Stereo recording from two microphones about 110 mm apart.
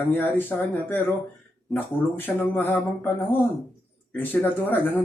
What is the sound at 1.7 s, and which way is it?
Speech, 20° left (ahead or behind).